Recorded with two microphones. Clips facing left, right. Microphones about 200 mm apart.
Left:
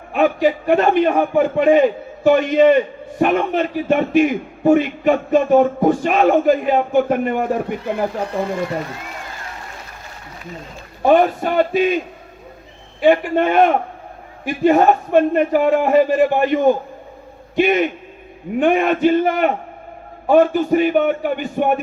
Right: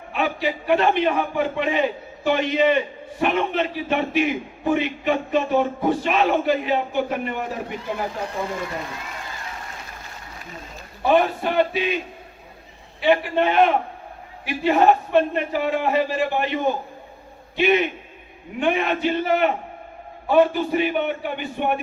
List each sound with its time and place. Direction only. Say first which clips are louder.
0.1 s a man's voice: left 8 dB; 45° left (ahead or behind)
11.0 s a man's voice: left 5 dB; 45° left (ahead or behind)
13.0 s a man's voice: left 5 dB; 50° left (ahead or behind)